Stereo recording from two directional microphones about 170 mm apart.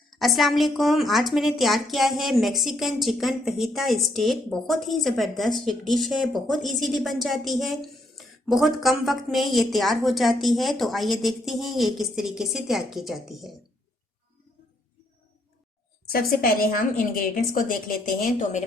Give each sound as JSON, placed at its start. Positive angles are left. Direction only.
{"t": 0.1, "sound": "a woman's voice", "side_deg": 0}
{"t": 16.0, "sound": "a woman's voice", "side_deg": 60}